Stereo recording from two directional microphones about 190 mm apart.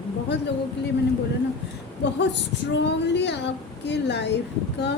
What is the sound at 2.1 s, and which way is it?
Speech, 65° left (ahead or behind).